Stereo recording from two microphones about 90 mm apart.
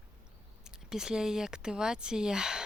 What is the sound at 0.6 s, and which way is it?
Speech, 5° right (ahead or behind).